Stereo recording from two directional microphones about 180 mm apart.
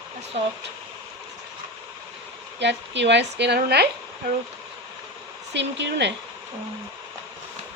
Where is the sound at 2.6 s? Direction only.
75° right (ahead or behind).